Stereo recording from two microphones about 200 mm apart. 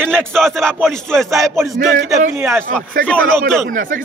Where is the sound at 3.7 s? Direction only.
40° right (ahead or behind).